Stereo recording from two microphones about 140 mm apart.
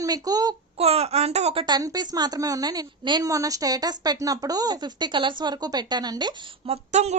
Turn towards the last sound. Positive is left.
turn(degrees=-50)  # may be behind; listen again after turning